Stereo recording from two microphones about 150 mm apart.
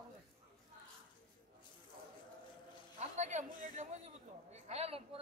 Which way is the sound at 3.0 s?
50° right (ahead or behind).